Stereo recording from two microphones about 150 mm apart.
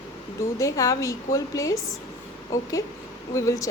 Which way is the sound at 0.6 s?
20° left (ahead or behind).